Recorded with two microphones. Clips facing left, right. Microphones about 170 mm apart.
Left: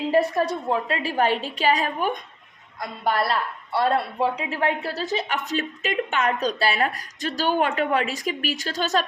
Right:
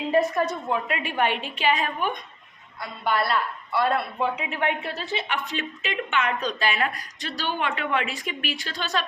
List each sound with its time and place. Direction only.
0.1 s speech: 30° left (ahead or behind)